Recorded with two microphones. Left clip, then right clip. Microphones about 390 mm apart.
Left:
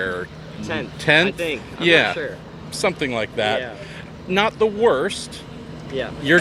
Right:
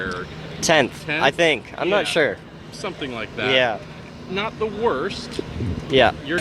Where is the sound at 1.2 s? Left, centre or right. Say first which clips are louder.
Right 6 dB; right.